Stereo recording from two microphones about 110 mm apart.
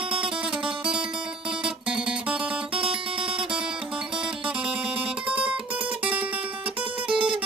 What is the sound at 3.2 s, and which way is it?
Music, 50° right (ahead or behind).